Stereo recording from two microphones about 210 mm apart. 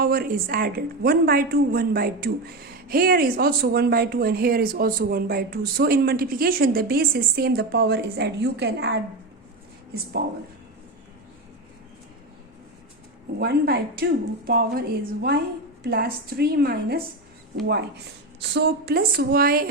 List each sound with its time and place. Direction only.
0.0 s a woman's voice: 45° right (ahead or behind)
13.4 s a woman's voice: 50° right (ahead or behind)